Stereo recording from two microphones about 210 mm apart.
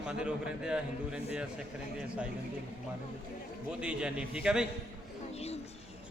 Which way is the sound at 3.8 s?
5° right (ahead or behind).